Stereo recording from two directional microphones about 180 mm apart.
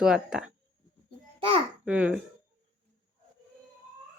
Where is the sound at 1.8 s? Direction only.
5° right (ahead or behind).